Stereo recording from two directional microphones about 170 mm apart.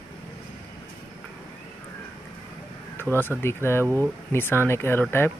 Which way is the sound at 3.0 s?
10° left (ahead or behind).